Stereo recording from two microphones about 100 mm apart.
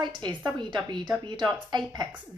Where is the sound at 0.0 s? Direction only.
50° right (ahead or behind).